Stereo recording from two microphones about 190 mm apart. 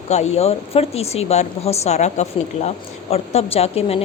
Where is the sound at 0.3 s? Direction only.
30° left (ahead or behind).